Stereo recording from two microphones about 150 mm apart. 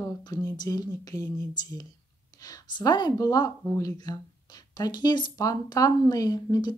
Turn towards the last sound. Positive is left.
turn(degrees=25)  # may be behind; listen again after turning